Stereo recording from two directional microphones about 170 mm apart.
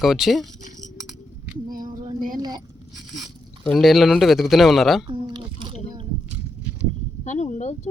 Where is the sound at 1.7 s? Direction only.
55° right (ahead or behind).